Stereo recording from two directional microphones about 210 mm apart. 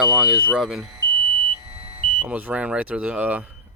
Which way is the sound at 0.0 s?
5° right (ahead or behind).